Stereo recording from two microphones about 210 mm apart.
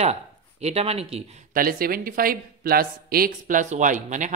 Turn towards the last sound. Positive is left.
turn(degrees=-35)  # may be behind; listen again after turning